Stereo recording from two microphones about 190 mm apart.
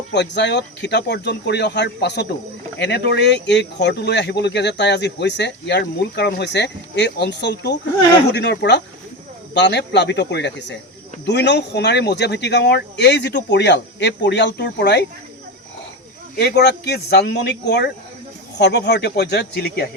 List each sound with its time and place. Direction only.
0.1 s speech: 65° left (ahead or behind)
16.4 s speech: 60° left (ahead or behind)